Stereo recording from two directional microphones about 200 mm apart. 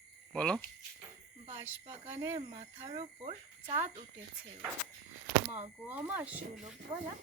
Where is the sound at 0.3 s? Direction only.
5° left (ahead or behind).